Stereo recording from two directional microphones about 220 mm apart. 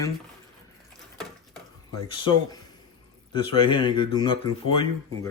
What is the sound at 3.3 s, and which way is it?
Speech, 20° left (ahead or behind).